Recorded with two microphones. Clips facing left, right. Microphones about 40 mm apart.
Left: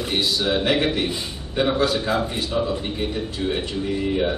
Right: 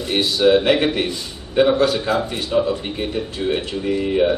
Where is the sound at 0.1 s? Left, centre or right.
Centre.